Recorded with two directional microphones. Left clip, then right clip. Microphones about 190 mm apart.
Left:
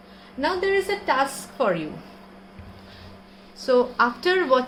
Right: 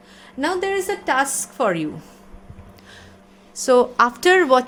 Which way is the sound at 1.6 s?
50° right (ahead or behind).